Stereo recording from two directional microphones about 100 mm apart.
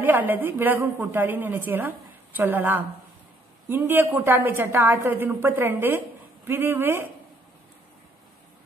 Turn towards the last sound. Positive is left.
turn(degrees=-20)  # may be behind; listen again after turning